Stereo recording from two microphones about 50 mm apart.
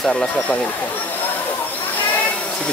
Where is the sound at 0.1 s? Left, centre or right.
Left.